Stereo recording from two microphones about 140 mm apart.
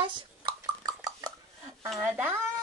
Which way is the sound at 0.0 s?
40° right (ahead or behind).